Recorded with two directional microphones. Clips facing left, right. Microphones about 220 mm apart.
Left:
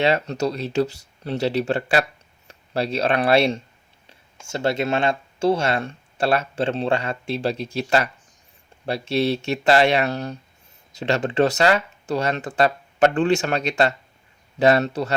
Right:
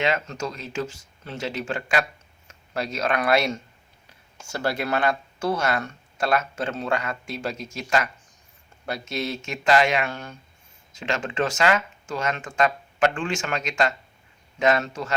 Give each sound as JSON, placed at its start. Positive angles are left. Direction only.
{"t": 0.0, "sound": "speech", "side_deg": 35}